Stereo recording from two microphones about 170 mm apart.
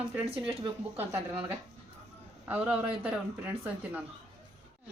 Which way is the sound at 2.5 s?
5° right (ahead or behind).